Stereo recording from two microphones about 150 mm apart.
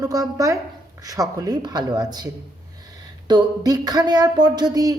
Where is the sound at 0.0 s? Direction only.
25° right (ahead or behind).